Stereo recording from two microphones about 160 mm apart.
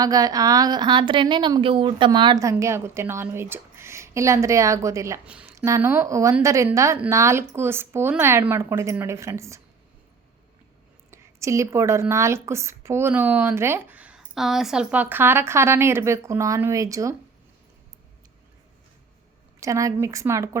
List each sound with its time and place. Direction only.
0.0 s a woman's voice: 25° right (ahead or behind)
5.2 s speech: 10° right (ahead or behind)
5.5 s a woman's voice: 20° right (ahead or behind)
11.1 s speech: 20° right (ahead or behind)
19.5 s a woman's voice: 20° right (ahead or behind)